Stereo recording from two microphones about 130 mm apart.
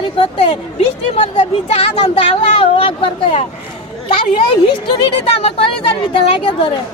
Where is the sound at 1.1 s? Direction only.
60° left (ahead or behind).